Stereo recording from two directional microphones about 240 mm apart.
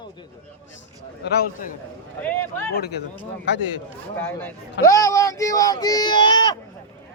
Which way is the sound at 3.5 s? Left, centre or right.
Left.